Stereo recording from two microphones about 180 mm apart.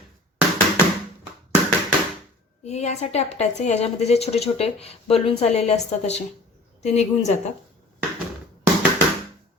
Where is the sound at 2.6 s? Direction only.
40° left (ahead or behind).